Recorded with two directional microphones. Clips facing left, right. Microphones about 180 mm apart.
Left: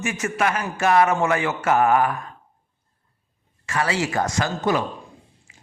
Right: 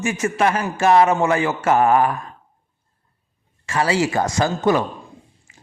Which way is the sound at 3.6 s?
30° right (ahead or behind).